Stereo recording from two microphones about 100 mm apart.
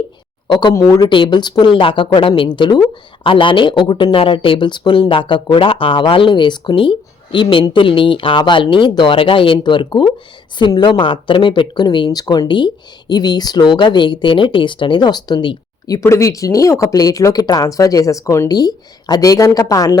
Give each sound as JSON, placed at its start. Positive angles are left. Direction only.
{"t": 0.4, "sound": "speech", "side_deg": 50}
{"t": 0.7, "sound": "speech", "side_deg": 30}
{"t": 1.0, "sound": "speech", "side_deg": 50}
{"t": 2.6, "sound": "speech", "side_deg": 45}
{"t": 16.0, "sound": "speech", "side_deg": 30}